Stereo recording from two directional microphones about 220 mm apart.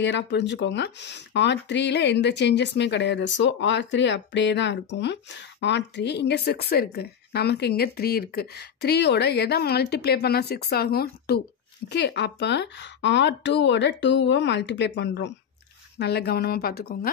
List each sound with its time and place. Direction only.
0.0 s speech: 55° left (ahead or behind)